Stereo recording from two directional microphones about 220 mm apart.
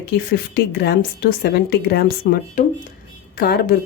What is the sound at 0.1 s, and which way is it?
A woman's voice, 45° left (ahead or behind).